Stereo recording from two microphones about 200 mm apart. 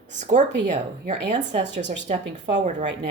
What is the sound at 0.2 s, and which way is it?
Speech, 35° right (ahead or behind).